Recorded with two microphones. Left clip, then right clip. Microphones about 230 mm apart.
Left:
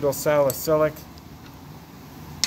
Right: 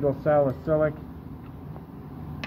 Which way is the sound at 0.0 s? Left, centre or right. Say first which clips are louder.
Left 2 dB; left.